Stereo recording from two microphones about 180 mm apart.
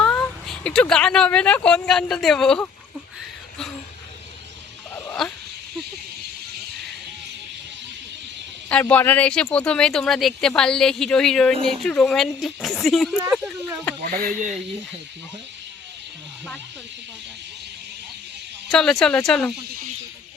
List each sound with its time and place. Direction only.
0.0 s a woman's voice: 10° left (ahead or behind)
4.9 s dog: 5° left (ahead or behind)
8.7 s speech: 10° left (ahead or behind)
14.0 s speech: 50° right (ahead or behind)
18.7 s speech: 5° left (ahead or behind)